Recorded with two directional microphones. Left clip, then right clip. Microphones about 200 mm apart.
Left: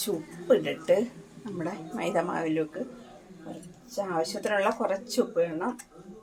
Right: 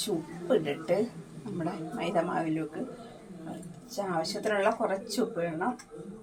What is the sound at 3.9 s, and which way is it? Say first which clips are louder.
Speech: left 2 dB; 45° left (ahead or behind).